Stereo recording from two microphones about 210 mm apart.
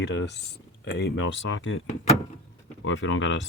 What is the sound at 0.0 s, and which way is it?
Speech, 55° left (ahead or behind).